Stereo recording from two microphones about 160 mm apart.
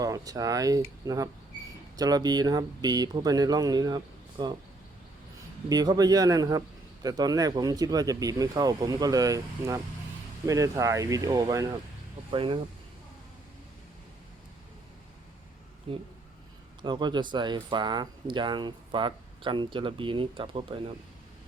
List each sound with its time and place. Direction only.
0.0 s speech: 20° right (ahead or behind)
5.6 s speech: 25° right (ahead or behind)
15.9 s speech: 35° right (ahead or behind)